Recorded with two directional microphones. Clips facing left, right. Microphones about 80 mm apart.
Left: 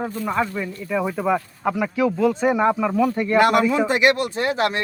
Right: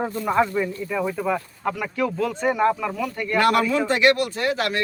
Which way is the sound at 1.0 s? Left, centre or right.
Centre.